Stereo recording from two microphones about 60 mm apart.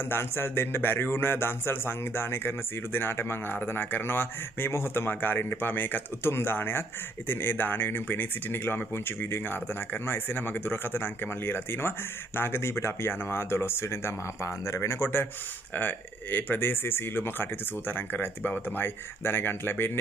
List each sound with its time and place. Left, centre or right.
0.1 s speech: left